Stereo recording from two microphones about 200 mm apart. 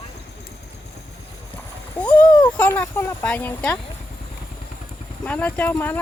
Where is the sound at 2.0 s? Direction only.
5° left (ahead or behind).